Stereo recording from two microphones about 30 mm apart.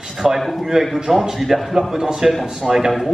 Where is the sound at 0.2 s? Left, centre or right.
Centre.